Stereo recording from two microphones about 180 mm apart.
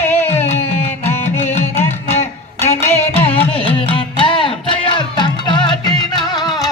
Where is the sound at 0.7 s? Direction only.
35° left (ahead or behind).